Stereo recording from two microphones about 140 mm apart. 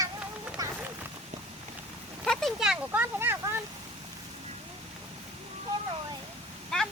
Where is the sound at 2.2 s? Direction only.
5° left (ahead or behind); by 3.6 s 15° right (ahead or behind).